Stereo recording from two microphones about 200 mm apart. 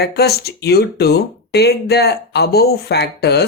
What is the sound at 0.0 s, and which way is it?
Speech, 55° left (ahead or behind).